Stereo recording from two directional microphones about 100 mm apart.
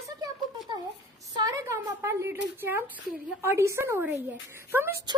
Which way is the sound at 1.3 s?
35° right (ahead or behind).